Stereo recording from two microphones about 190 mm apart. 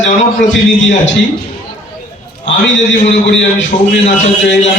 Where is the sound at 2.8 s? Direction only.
40° left (ahead or behind).